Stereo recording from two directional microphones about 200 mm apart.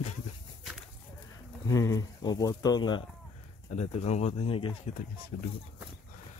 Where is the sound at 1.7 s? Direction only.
15° left (ahead or behind).